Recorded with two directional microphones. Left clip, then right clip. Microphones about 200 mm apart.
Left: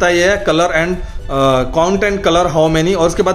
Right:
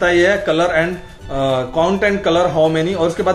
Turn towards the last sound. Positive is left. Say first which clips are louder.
# left 3 dB
turn(degrees=45)  # may be behind; listen again after turning